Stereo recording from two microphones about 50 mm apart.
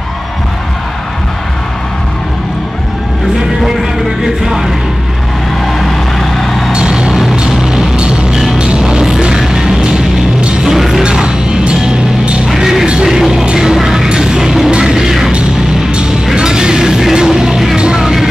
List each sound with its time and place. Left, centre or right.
4.2 s music: centre
5.7 s vehicle: centre
6.7 s music: centre
11.0 s music: centre
12.4 s music: centre
12.8 s music: centre
13.1 s music: centre
16.3 s music: centre